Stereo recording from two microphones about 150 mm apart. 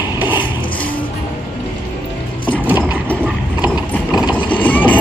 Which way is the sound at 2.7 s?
10° right (ahead or behind).